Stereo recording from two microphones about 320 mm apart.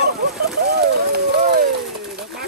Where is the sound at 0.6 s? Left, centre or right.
Right.